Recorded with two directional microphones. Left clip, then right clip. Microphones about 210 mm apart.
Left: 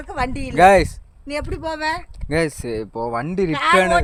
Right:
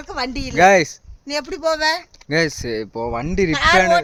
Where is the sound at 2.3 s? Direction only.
5° right (ahead or behind).